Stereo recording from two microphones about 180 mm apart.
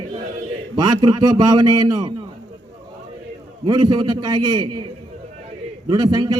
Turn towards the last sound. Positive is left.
turn(degrees=-25)  # may be behind; listen again after turning